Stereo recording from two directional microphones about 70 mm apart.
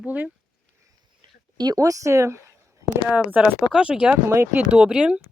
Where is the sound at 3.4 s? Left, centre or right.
Centre.